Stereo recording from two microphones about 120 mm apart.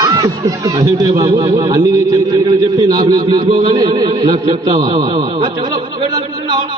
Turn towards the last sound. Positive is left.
turn(degrees=-35)  # may be behind; listen again after turning